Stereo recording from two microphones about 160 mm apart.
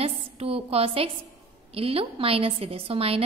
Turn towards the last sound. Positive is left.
turn(degrees=-35)  # may be behind; listen again after turning